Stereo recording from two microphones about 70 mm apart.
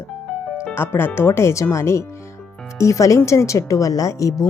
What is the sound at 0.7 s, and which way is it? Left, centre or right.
Speech, left.